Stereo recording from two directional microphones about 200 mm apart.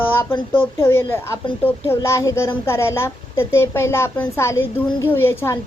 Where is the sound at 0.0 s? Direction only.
10° left (ahead or behind).